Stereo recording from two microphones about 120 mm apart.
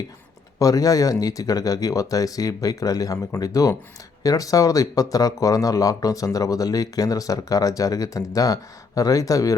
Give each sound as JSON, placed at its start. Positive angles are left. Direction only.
{"t": 0.6, "sound": "speech", "side_deg": 30}